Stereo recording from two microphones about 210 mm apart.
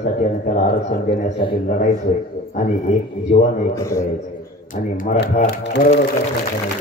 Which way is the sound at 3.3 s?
30° left (ahead or behind).